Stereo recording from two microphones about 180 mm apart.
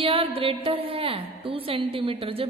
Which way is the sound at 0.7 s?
30° right (ahead or behind).